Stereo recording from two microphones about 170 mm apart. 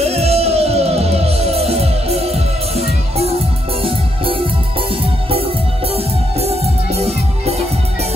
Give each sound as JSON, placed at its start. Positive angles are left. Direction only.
{"t": 0.0, "sound": "music", "side_deg": -35}
{"t": 7.0, "sound": "music", "side_deg": -40}